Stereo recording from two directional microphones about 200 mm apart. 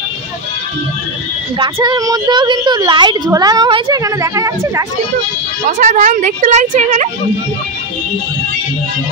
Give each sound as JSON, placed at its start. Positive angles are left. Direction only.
{"t": 1.6, "sound": "a woman's voice", "side_deg": -20}
{"t": 5.7, "sound": "a woman's voice", "side_deg": -40}